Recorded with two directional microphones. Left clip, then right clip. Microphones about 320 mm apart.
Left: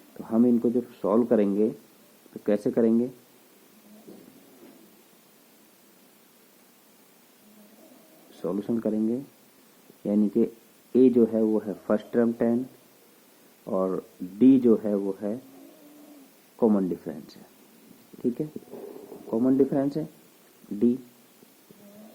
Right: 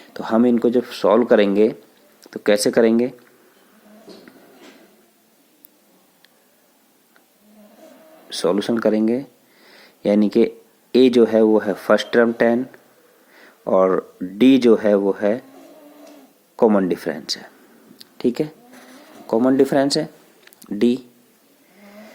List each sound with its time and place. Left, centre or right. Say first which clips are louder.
0.2 s speech: right 7 dB; right
8.4 s speech: right 11 dB; right
13.7 s speech: right 12 dB; right
16.6 s speech: right 8 dB; right
19.3 s speech: right 8 dB; right